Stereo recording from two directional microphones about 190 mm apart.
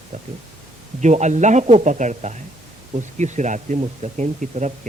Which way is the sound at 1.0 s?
40° right (ahead or behind).